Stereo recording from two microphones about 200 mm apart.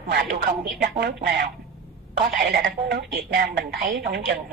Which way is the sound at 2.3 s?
50° right (ahead or behind).